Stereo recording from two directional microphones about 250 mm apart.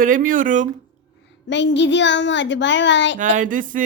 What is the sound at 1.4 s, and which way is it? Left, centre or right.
A child's voice, left.